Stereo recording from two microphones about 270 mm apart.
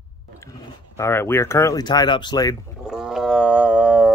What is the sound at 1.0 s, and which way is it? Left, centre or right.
Speech, centre.